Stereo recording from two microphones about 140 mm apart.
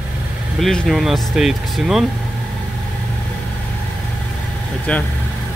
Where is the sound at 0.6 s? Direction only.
Centre (ahead or behind).